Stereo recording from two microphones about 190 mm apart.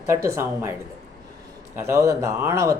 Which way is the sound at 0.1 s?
15° right (ahead or behind).